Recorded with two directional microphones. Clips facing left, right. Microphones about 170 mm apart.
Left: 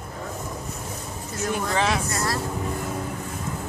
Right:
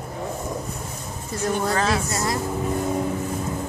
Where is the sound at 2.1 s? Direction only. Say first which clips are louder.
Right 2 dB; 20° right (ahead or behind).